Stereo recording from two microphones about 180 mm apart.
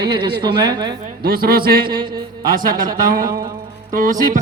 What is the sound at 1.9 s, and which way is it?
Speech, 25° right (ahead or behind).